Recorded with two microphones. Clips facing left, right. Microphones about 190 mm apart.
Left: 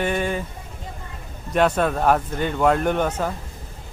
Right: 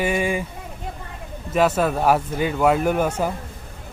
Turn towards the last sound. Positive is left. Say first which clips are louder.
# right 1 dB
turn(degrees=-10)  # may be behind; listen again after turning